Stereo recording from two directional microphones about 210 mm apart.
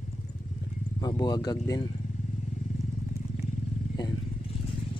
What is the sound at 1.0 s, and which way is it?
Speech, 20° left (ahead or behind).